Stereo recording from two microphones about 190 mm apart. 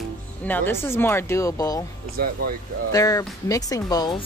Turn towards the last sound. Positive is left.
turn(degrees=20)  # may be behind; listen again after turning